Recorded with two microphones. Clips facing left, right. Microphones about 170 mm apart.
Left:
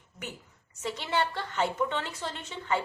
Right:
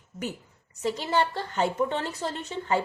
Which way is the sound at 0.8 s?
40° right (ahead or behind).